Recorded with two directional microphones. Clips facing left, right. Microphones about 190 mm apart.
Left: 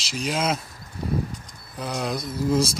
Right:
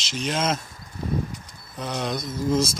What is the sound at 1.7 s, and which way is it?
Speech, 5° left (ahead or behind).